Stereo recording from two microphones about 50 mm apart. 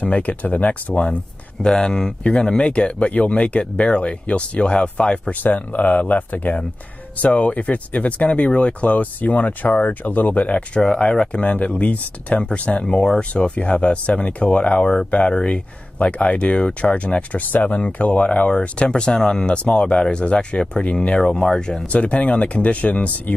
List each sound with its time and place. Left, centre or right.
0.0 s speech: left
1.6 s speech: centre
5.3 s speech: left
10.8 s speech: centre